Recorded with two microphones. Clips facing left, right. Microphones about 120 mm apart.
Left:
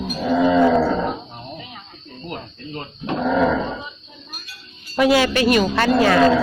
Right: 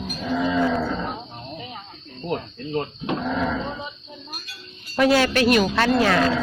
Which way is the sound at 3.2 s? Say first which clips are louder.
Left 9 dB; 90° left.